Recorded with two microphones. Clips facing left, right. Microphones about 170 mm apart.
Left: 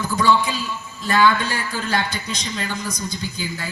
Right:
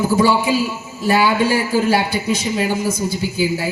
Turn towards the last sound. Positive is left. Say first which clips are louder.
# right 9 dB
turn(degrees=-10)  # may be behind; listen again after turning